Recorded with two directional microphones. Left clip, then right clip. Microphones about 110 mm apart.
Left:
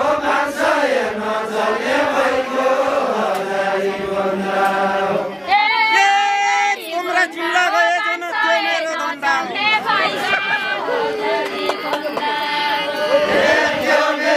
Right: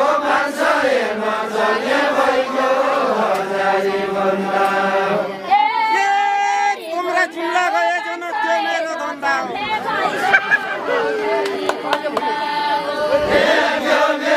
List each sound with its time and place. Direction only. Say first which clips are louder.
5.5 s female singing: left 1 dB; 40° left (ahead or behind)
5.9 s child singing: left 2 dB; 5° left (ahead or behind)
7.2 s a sound: left 2 dB; centre (ahead or behind)
9.7 s chatter: left 4 dB; 45° left (ahead or behind)